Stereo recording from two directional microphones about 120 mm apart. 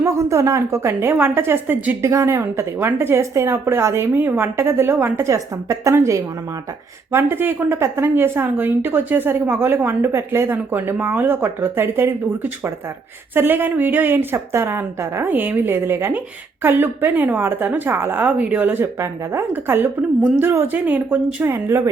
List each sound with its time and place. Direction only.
0.0 s a woman's voice: 25° right (ahead or behind)